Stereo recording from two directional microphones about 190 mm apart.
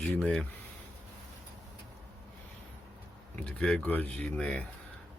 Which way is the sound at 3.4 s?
5° left (ahead or behind).